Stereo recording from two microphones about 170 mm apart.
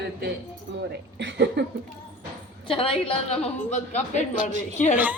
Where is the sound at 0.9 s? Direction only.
85° right.